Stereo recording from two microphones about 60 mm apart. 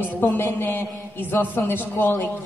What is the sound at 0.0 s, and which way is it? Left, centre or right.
A man's voice, left.